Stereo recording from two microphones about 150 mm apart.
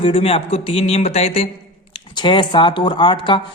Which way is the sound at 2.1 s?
30° left (ahead or behind).